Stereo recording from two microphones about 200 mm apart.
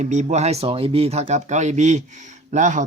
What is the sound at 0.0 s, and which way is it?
Speech, 35° right (ahead or behind).